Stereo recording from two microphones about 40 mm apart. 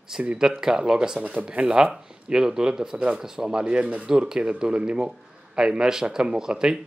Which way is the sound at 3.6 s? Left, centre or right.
Right.